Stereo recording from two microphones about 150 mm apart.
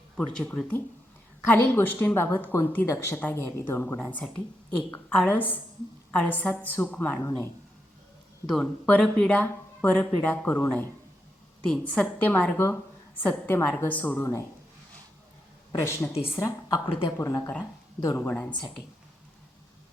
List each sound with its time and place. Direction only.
0.3 s speech: 5° left (ahead or behind)
8.4 s speech: 5° left (ahead or behind)
15.8 s a woman's voice: 15° left (ahead or behind)